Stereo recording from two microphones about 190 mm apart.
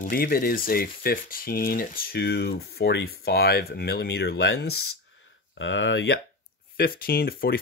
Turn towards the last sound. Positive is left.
turn(degrees=50)  # may be behind; listen again after turning